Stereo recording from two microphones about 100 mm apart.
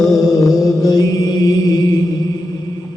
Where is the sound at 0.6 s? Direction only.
35° left (ahead or behind).